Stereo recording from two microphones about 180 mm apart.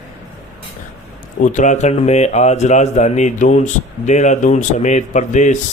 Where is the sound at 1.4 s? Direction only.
40° left (ahead or behind).